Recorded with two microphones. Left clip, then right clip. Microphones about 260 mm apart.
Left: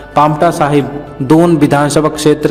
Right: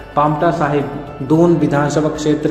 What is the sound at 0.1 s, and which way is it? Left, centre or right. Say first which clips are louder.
A man's voice: left 5 dB; left.